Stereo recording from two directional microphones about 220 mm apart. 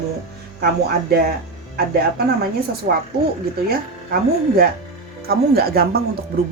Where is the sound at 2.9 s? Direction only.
35° right (ahead or behind).